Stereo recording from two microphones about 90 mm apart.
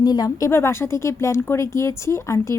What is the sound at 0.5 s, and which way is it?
Speech, 30° left (ahead or behind).